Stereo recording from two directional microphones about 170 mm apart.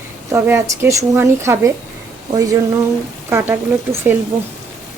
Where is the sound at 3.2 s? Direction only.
15° right (ahead or behind).